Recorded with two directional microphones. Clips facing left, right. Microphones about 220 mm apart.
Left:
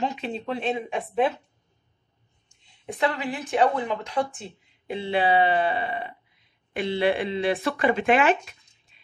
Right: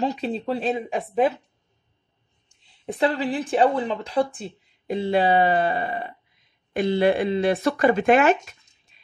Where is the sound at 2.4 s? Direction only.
35° right (ahead or behind).